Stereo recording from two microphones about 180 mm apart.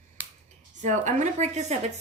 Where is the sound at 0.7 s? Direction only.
45° right (ahead or behind).